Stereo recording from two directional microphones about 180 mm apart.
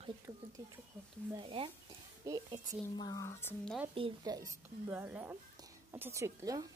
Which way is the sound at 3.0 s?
20° left (ahead or behind).